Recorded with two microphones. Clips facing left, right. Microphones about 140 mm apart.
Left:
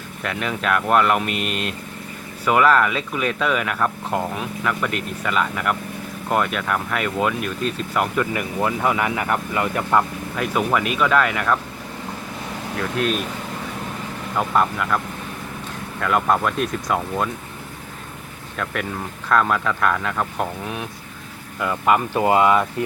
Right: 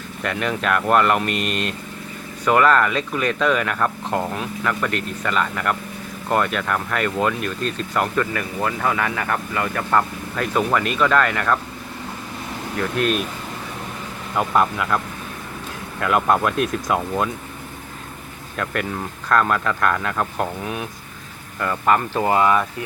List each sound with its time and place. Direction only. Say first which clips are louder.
0.2 s speech: right 2 dB; centre (ahead or behind); by 10.0 s 15° left (ahead or behind)
10.3 s speech: right 1 dB; 5° left (ahead or behind)
13.0 s speech: right 1 dB; centre (ahead or behind)
14.3 s speech: right 1 dB; centre (ahead or behind)
18.5 s speech: right 1 dB; centre (ahead or behind); by 22.6 s 20° left (ahead or behind)